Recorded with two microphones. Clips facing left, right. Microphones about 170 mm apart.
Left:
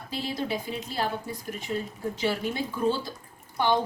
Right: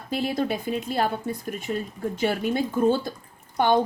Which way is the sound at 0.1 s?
55° right (ahead or behind).